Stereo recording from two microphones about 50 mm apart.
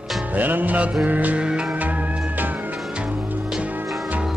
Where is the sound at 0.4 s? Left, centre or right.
Right.